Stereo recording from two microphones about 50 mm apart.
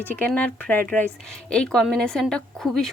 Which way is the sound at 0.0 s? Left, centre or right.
Left.